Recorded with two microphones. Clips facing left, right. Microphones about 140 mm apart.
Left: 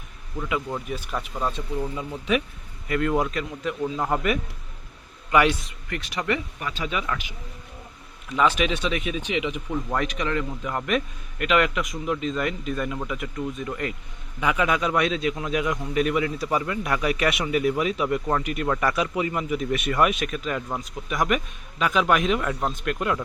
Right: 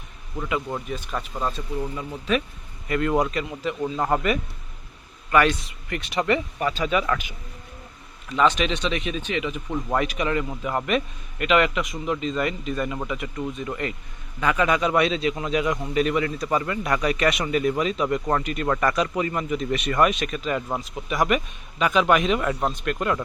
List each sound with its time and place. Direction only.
0.4 s speech: centre (ahead or behind)
2.8 s a man's voice: centre (ahead or behind)
5.3 s speech: 15° left (ahead or behind)
5.9 s speech: 25° right (ahead or behind); by 7.0 s 45° right (ahead or behind)
8.3 s a man's voice: 5° left (ahead or behind)
9.6 s a man's voice: 10° right (ahead or behind)